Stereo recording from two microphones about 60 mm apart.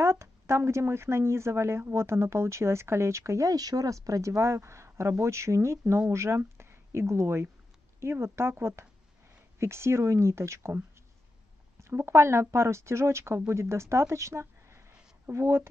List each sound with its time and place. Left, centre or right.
0.0 s speech: right
11.8 s speech: right